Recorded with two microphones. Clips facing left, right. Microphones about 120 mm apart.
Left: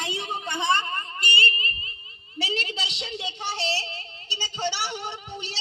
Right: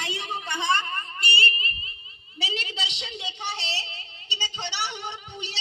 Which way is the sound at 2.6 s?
35° left (ahead or behind).